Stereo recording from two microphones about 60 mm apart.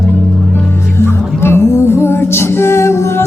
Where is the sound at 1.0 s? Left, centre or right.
Left.